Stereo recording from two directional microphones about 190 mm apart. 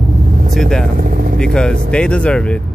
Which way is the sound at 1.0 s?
50° right (ahead or behind).